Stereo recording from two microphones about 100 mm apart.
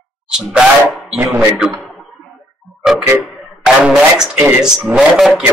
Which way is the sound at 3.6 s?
5° right (ahead or behind).